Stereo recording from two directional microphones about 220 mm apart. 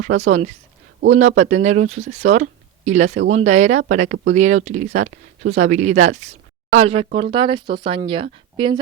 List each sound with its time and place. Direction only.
0.0 s speech: 30° right (ahead or behind)